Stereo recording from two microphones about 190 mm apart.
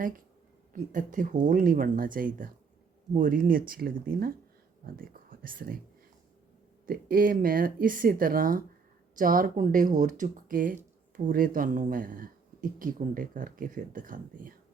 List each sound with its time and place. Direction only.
0.7 s speech: 45° right (ahead or behind)
6.8 s speech: 50° right (ahead or behind)